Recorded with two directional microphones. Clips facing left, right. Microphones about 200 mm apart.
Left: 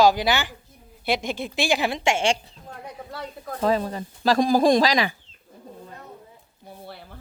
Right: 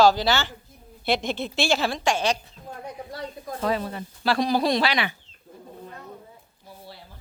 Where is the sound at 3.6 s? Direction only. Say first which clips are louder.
Left 4 dB; 35° left (ahead or behind).